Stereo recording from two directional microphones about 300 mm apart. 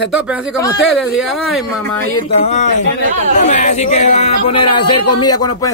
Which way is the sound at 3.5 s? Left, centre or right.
Left.